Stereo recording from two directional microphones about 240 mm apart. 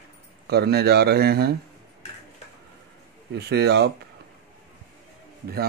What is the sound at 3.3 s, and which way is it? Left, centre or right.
Speech, right.